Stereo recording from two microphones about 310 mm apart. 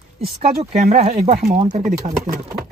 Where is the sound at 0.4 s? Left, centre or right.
Centre.